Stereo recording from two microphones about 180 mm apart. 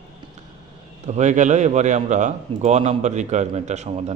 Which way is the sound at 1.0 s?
40° right (ahead or behind).